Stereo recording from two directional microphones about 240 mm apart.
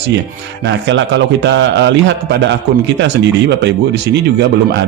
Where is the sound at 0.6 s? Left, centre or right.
Right.